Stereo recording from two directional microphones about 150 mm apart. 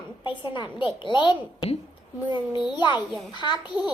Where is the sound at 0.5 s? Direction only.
35° left (ahead or behind).